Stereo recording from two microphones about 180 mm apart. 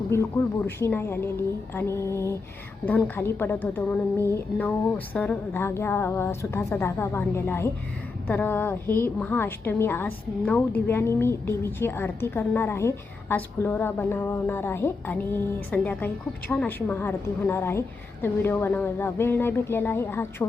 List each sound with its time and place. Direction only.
0.1 s a woman's voice: 15° left (ahead or behind)